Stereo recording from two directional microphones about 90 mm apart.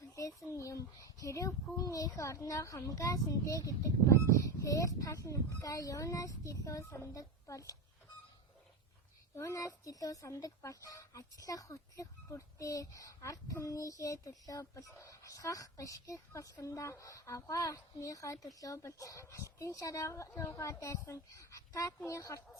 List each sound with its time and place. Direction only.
0.2 s speech: 35° left (ahead or behind)
9.3 s speech: 35° left (ahead or behind)